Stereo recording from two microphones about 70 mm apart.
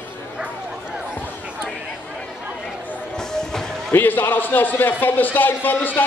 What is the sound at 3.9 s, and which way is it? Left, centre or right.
A man's voice, left.